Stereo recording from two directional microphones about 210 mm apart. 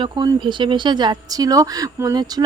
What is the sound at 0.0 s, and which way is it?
Speech, 20° right (ahead or behind).